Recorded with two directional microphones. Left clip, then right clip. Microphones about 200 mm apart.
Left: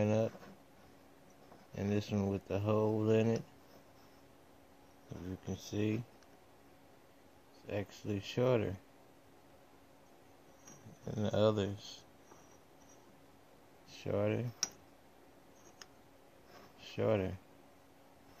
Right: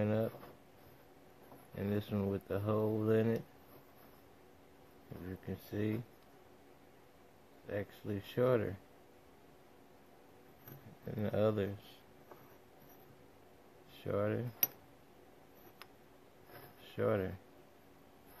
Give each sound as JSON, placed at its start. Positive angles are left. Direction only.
{"t": 0.0, "sound": "a sound", "side_deg": 15}
{"t": 1.8, "sound": "speech", "side_deg": 15}
{"t": 5.5, "sound": "speech", "side_deg": 15}
{"t": 7.6, "sound": "speech", "side_deg": 15}
{"t": 11.1, "sound": "speech", "side_deg": 15}
{"t": 13.9, "sound": "speech", "side_deg": 15}
{"t": 16.8, "sound": "speech", "side_deg": 15}